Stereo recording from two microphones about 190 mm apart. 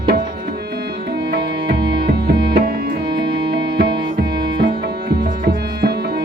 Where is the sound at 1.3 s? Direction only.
60° right (ahead or behind).